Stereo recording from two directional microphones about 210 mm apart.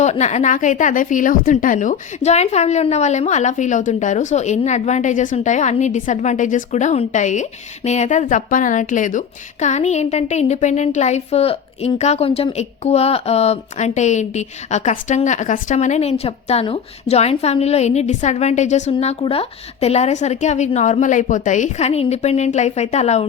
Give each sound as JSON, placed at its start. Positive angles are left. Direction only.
{"t": 0.0, "sound": "a woman's voice", "side_deg": 35}